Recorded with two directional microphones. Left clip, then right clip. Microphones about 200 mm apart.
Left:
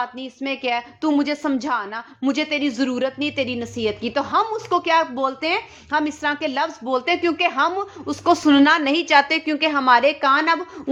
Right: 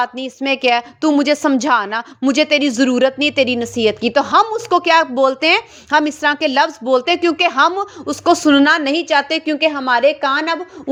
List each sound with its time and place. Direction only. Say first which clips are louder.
0.0 s a woman's voice: right 7 dB; 30° right (ahead or behind); by 10.6 s 10° right (ahead or behind)